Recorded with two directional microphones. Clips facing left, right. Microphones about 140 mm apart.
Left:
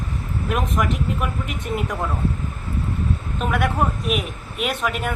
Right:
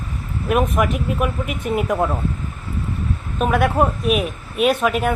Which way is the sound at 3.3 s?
25° right (ahead or behind).